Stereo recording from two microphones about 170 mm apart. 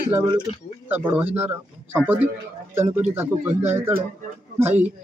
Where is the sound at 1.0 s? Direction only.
10° right (ahead or behind).